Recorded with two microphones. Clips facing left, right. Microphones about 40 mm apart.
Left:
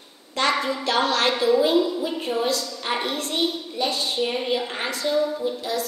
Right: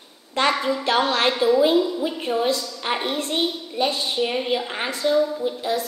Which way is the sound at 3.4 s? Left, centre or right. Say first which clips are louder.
Even; centre.